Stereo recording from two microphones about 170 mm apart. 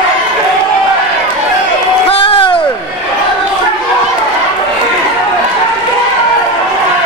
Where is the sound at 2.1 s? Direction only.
35° left (ahead or behind).